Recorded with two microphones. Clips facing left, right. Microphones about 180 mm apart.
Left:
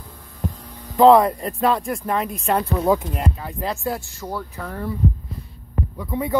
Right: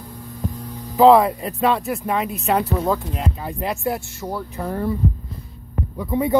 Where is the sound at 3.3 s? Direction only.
20° right (ahead or behind).